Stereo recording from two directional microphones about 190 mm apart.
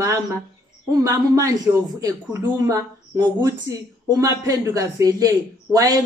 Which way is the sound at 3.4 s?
20° right (ahead or behind).